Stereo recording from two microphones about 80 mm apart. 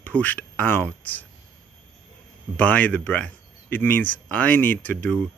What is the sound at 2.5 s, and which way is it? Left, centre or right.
A man's voice, centre.